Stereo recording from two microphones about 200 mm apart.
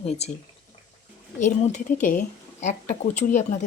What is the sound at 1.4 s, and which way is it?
Speech, 35° left (ahead or behind).